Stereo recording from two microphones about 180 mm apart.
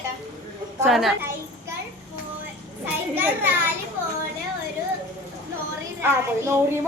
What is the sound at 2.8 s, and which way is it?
Speech, 10° right (ahead or behind).